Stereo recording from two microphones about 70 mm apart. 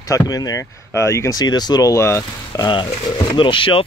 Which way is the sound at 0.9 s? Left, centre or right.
Left.